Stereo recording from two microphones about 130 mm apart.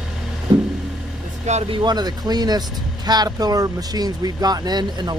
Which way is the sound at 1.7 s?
35° right (ahead or behind).